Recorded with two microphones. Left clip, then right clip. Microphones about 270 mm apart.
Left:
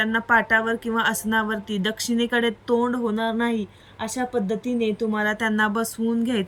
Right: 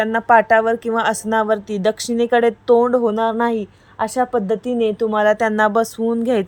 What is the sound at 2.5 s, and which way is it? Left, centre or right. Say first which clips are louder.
Speech: right 9 dB; right.